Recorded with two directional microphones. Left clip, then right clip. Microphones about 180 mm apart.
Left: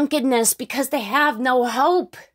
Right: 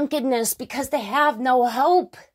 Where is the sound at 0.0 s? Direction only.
35° left (ahead or behind).